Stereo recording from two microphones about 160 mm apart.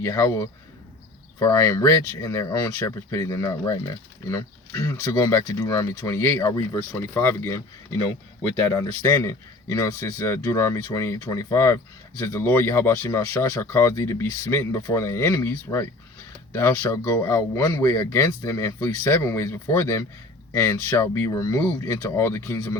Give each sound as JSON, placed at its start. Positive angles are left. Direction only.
{"t": 0.0, "sound": "speech", "side_deg": 20}
{"t": 8.7, "sound": "speech", "side_deg": 20}